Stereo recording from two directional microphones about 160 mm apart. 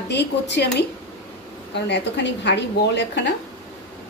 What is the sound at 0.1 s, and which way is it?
Speech, 90° left.